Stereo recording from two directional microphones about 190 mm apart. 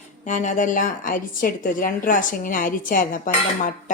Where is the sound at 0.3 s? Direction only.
40° left (ahead or behind).